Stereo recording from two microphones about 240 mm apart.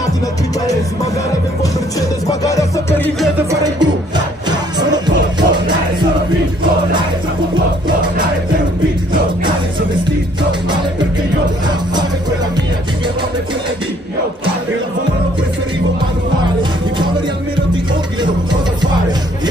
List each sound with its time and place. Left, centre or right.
2.4 s music: centre
3.3 s music: centre
11.6 s music: centre
18.2 s music: centre